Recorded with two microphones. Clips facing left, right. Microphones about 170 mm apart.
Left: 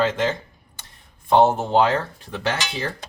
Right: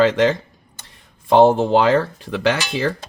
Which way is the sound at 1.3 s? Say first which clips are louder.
Right 4 dB; 90° right.